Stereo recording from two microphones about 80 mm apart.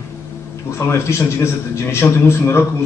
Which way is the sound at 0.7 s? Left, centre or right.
Left.